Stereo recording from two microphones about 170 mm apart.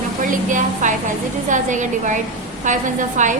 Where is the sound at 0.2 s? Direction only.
50° right (ahead or behind).